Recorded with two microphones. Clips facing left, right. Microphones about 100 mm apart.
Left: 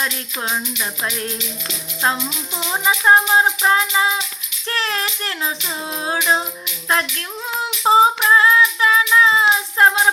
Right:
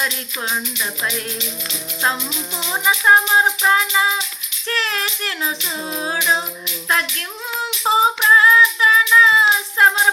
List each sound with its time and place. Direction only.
2.8 s music: 25° left (ahead or behind)
7.9 s child singing: 30° left (ahead or behind)